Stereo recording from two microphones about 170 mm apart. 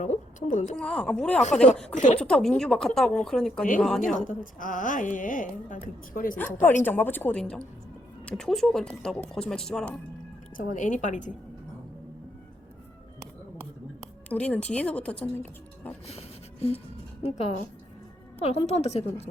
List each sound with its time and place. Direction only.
0.0 s a woman's voice: 45° left (ahead or behind)
0.8 s speech: 5° left (ahead or behind)
4.0 s a woman's voice: 50° left (ahead or behind)
6.3 s speech: 10° left (ahead or behind)
10.6 s a woman's voice: 50° left (ahead or behind)
14.3 s speech: 10° left (ahead or behind)
16.0 s a sound: 35° left (ahead or behind)
17.2 s a woman's voice: 40° left (ahead or behind)